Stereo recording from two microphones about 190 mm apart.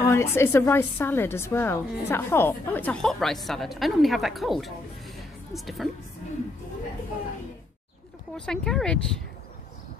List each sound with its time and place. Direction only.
0.0 s a woman's voice: 15° left (ahead or behind)
8.4 s speech: 5° left (ahead or behind)